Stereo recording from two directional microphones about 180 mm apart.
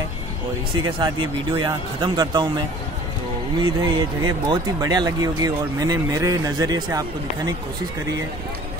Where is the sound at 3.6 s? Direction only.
25° right (ahead or behind).